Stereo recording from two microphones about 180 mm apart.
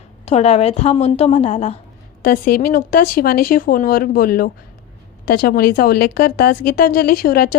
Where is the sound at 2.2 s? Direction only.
55° left (ahead or behind).